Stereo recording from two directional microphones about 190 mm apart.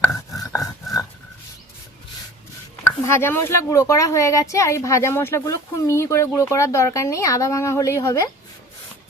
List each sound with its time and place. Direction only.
0.0 s dog: centre (ahead or behind)
0.3 s a sound: 20° left (ahead or behind)
3.0 s speech: 10° left (ahead or behind)